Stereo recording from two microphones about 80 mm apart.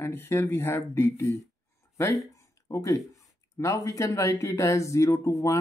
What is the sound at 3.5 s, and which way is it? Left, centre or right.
Speech, left.